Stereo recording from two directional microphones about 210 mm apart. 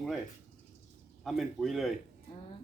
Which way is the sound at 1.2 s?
Centre (ahead or behind).